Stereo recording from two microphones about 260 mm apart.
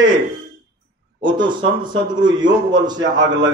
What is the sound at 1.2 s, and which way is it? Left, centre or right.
Speech, centre.